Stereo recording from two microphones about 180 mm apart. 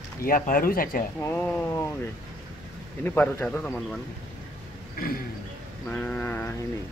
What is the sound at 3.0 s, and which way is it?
Speech, 10° left (ahead or behind).